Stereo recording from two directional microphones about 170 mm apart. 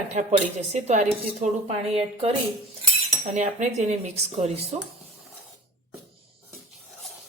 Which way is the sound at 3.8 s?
40° right (ahead or behind).